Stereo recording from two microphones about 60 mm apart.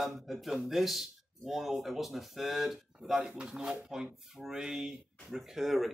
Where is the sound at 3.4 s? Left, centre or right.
Centre.